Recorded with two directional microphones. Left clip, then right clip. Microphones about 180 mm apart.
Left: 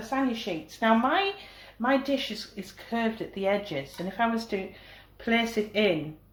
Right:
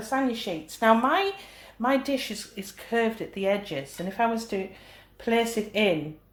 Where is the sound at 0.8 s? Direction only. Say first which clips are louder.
Right 3 dB; 35° right (ahead or behind).